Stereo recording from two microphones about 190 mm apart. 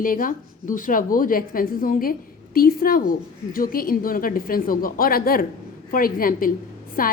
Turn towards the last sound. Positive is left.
turn(degrees=50)  # may be behind; listen again after turning